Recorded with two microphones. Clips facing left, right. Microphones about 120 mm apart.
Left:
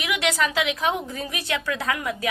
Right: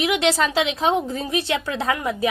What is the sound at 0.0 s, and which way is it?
A woman's voice, 30° right (ahead or behind).